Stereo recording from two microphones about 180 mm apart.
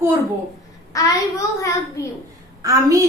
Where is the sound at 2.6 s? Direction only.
20° right (ahead or behind).